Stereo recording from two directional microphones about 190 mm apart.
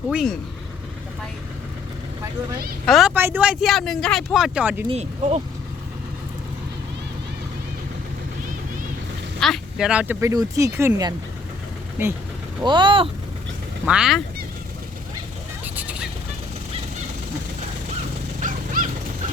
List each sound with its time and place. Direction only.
0.1 s speech: 5° right (ahead or behind)
2.8 s speech: centre (ahead or behind)
4.9 s speech: 35° right (ahead or behind)
9.4 s speech: centre (ahead or behind)
12.6 s speech: 25° right (ahead or behind)
13.8 s speech: 5° right (ahead or behind)
15.6 s vehicle: 10° right (ahead or behind)
18.3 s dog: 45° right (ahead or behind)